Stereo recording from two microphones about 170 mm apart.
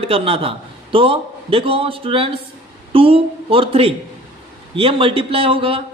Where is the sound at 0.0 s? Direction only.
35° right (ahead or behind).